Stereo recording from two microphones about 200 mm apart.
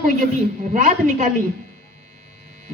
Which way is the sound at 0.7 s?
40° right (ahead or behind).